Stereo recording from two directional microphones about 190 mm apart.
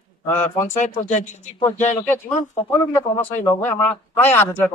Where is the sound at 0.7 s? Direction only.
40° left (ahead or behind).